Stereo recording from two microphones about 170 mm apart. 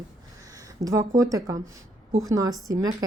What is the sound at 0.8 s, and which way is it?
Speech, 20° right (ahead or behind).